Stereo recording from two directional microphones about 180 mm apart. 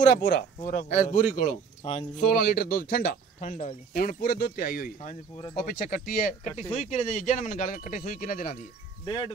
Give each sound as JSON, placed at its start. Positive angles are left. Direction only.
{"t": 0.2, "sound": "speech", "side_deg": 55}
{"t": 0.6, "sound": "speech", "side_deg": 45}
{"t": 1.8, "sound": "speech", "side_deg": 35}
{"t": 2.2, "sound": "speech", "side_deg": 60}
{"t": 6.7, "sound": "speech", "side_deg": 40}
{"t": 9.0, "sound": "speech", "side_deg": 25}